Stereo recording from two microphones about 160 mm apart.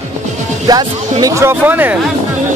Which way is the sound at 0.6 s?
25° right (ahead or behind).